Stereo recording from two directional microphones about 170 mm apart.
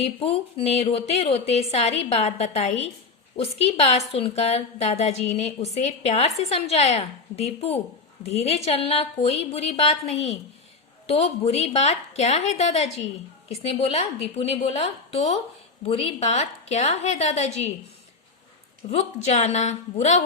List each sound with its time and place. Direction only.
0.0 s a woman's voice: 35° left (ahead or behind)
18.9 s a woman's voice: 40° left (ahead or behind)